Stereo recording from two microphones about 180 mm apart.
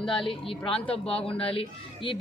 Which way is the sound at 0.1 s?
30° left (ahead or behind).